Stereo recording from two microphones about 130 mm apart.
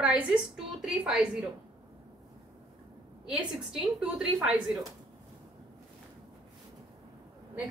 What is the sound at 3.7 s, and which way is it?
A woman's voice, 5° right (ahead or behind).